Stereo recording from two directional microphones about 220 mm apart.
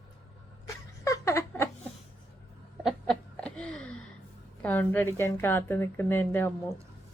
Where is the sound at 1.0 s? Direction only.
15° left (ahead or behind).